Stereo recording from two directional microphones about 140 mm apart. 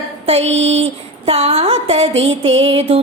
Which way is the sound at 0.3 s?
50° right (ahead or behind).